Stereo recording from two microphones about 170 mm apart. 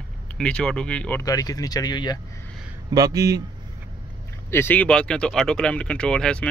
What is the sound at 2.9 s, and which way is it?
Speech, 20° right (ahead or behind).